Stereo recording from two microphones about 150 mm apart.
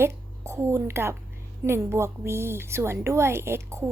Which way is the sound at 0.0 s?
15° right (ahead or behind).